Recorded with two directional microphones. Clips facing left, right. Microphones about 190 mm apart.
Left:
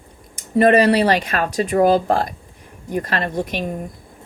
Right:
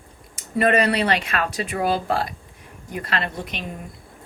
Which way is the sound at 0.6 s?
35° left (ahead or behind).